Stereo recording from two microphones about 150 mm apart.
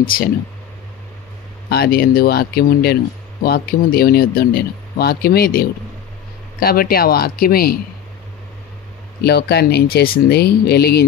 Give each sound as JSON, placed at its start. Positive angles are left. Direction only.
{"t": 1.7, "sound": "speech", "side_deg": 90}
{"t": 9.2, "sound": "speech", "side_deg": 90}